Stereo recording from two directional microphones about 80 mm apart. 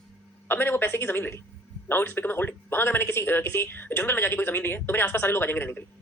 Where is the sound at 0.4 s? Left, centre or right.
Left.